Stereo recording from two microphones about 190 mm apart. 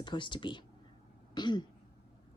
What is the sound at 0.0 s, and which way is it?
A woman's voice, 25° left (ahead or behind).